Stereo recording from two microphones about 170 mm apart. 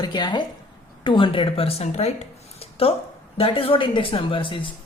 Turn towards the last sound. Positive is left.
turn(degrees=30)  # may be behind; listen again after turning